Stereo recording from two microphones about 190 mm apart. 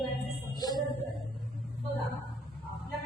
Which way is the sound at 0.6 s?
20° left (ahead or behind).